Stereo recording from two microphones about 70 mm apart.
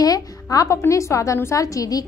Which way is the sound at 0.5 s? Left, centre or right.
Left.